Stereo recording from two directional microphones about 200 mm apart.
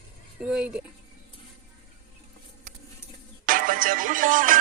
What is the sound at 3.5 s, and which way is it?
Music, 45° right (ahead or behind).